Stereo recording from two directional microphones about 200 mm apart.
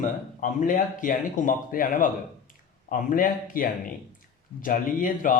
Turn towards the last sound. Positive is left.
turn(degrees=45)  # may be behind; listen again after turning